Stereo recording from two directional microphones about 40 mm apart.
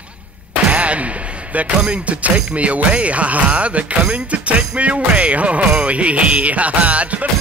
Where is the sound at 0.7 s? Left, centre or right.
Right.